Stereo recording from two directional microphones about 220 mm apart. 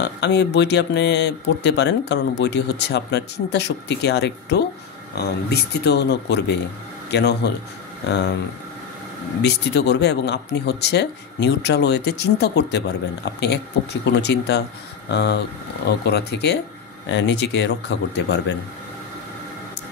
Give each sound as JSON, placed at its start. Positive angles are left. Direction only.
{"t": 0.0, "sound": "speech", "side_deg": 50}
{"t": 9.4, "sound": "speech", "side_deg": 50}